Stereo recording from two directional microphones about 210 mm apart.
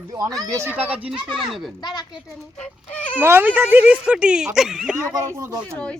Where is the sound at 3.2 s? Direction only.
10° right (ahead or behind).